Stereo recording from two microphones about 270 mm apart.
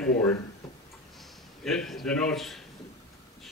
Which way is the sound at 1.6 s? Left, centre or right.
Centre.